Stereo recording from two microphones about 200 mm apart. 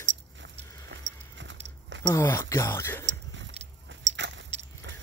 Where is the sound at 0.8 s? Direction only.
65° right (ahead or behind).